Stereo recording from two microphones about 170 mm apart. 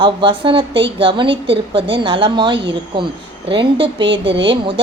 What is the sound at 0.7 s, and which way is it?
Speech, 90° right.